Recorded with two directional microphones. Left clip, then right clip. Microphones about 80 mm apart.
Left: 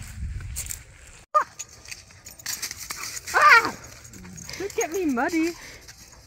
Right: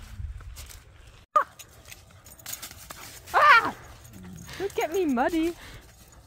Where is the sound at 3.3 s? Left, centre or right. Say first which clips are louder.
Left 2 dB; right.